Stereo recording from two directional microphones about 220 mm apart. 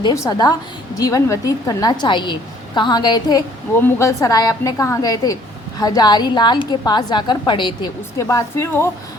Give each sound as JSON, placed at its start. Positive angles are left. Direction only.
{"t": 0.0, "sound": "a woman's voice", "side_deg": 15}